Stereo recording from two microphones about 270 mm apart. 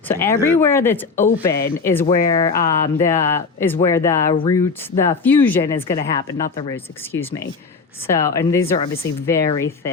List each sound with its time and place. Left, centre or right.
0.1 s speech: centre